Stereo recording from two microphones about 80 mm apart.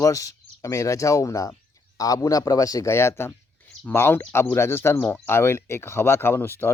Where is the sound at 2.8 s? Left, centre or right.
Left.